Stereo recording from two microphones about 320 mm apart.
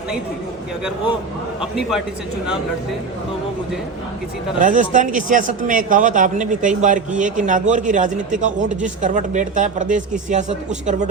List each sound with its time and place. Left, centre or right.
4.6 s a man's voice: right